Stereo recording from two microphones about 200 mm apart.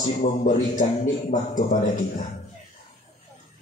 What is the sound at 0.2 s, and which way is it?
Music, 40° left (ahead or behind).